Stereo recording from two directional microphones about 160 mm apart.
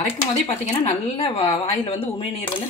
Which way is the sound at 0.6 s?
40° left (ahead or behind).